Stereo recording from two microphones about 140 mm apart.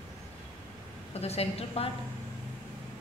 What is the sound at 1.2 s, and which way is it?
Speech, 45° left (ahead or behind).